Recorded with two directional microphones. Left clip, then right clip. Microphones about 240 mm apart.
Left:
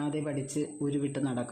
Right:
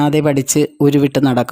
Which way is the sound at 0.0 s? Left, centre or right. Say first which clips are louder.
Right 19 dB; right.